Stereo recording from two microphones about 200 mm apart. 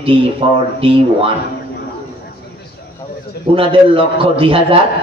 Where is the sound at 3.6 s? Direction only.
25° right (ahead or behind).